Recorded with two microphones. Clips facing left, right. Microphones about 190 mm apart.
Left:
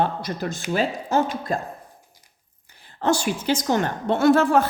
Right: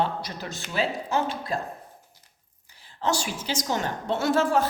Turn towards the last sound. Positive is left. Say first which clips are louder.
# left 6 dB
turn(degrees=60)  # may be behind; listen again after turning